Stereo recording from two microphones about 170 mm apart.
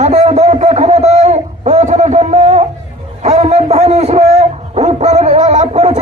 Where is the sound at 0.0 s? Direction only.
40° right (ahead or behind).